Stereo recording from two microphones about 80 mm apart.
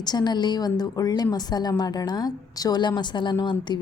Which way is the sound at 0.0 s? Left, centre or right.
Left.